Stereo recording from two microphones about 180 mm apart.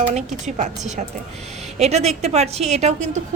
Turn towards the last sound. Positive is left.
turn(degrees=-40)  # may be behind; listen again after turning